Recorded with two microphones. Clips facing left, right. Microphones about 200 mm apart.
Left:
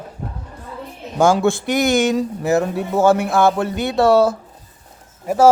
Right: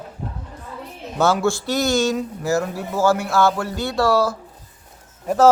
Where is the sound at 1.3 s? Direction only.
20° left (ahead or behind).